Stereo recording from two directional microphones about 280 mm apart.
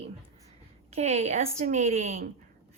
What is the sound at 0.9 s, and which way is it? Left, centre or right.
Speech, right.